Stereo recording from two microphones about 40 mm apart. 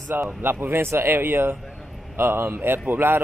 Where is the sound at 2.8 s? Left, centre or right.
Right.